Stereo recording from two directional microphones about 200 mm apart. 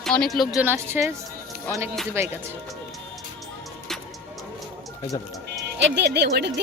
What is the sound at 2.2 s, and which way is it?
Speech, 10° right (ahead or behind).